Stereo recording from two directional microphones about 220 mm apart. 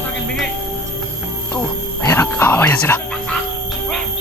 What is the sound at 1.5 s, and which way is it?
Music, 10° left (ahead or behind).